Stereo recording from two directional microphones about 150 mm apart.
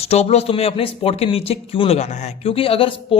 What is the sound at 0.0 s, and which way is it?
A man's voice, 45° left (ahead or behind).